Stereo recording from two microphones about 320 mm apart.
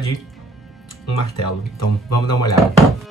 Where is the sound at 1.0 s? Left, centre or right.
Left.